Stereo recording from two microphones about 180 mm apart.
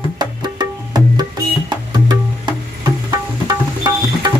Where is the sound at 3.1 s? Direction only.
20° right (ahead or behind).